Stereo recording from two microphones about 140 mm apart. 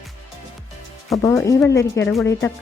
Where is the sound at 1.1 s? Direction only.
25° left (ahead or behind).